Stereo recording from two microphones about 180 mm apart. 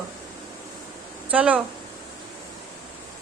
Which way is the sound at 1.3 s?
5° right (ahead or behind).